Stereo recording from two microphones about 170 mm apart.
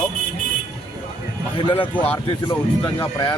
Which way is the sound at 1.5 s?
30° left (ahead or behind).